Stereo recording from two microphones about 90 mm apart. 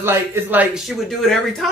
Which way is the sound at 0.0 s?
25° right (ahead or behind).